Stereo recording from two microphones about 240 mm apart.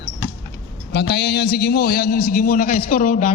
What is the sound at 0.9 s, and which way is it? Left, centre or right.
A man's voice, left.